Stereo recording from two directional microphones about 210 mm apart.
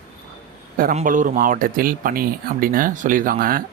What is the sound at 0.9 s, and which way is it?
Speech, 40° right (ahead or behind).